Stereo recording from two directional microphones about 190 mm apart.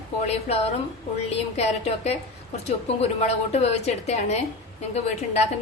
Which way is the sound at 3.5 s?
35° left (ahead or behind).